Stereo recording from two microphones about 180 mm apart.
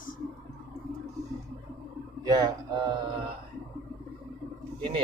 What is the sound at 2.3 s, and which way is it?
Speech, 25° right (ahead or behind).